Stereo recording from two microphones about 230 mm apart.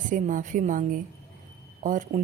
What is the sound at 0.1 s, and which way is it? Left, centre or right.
A woman's voice, right.